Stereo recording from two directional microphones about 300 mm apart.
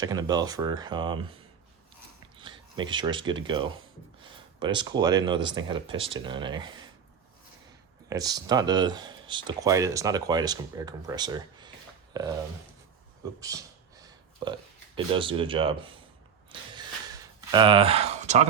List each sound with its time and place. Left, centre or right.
0.0 s speech: centre
2.4 s speech: centre
8.1 s speech: centre
13.4 s speech: centre
16.5 s a sound: centre